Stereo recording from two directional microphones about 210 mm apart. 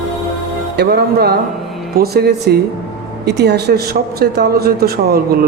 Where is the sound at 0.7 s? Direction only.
50° right (ahead or behind).